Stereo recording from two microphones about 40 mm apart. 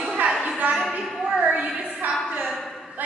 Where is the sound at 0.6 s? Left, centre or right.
Right.